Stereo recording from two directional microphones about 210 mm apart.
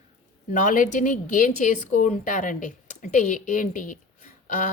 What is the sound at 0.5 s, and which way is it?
A woman's voice, 40° left (ahead or behind).